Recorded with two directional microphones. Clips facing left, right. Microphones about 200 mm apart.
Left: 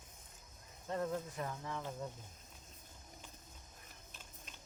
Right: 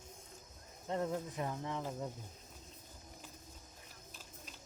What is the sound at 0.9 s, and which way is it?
Speech, 20° right (ahead or behind).